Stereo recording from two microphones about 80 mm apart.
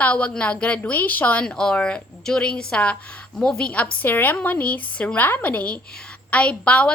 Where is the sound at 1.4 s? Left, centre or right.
Centre.